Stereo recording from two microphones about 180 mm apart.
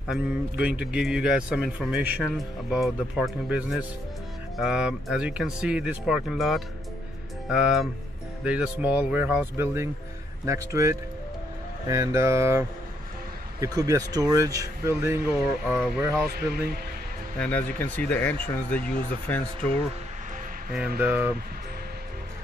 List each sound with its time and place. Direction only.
0.1 s a man's voice: 5° right (ahead or behind)
15.8 s a man's voice: centre (ahead or behind)
16.3 s speech: 60° right (ahead or behind)
17.4 s speech: 10° left (ahead or behind)
21.0 s speech: 10° right (ahead or behind)